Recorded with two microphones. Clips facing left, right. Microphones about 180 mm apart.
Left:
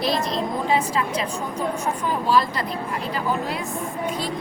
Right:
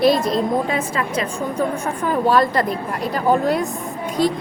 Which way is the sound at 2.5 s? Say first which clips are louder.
Right 6 dB; 45° right (ahead or behind).